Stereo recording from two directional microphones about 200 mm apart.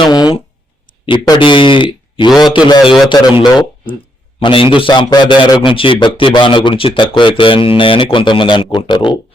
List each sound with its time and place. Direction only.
0.0 s a sound: 20° left (ahead or behind)
1.1 s speech: 25° left (ahead or behind)
2.8 s a man's voice: centre (ahead or behind)
3.1 s speech: 20° left (ahead or behind)